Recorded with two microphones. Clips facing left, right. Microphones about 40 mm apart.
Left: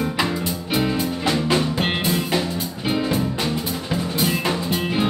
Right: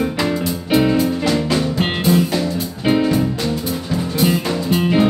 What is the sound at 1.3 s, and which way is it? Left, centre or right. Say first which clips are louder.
Music: right 2 dB; centre.